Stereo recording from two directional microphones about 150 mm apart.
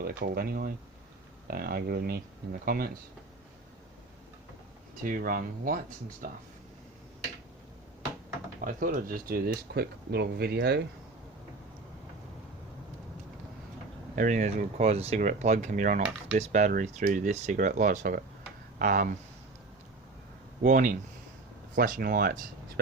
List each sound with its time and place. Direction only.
0.0 s speech: 85° right
5.0 s speech: 65° right (ahead or behind)
8.6 s speech: 65° right (ahead or behind); by 10.8 s 90° right
14.2 s speech: 55° right (ahead or behind)
20.6 s speech: 60° right (ahead or behind); by 22.4 s 80° right